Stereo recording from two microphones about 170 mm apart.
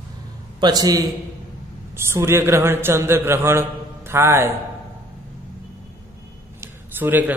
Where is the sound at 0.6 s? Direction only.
20° right (ahead or behind).